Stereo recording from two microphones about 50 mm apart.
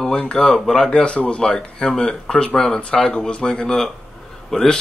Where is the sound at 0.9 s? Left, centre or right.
Left.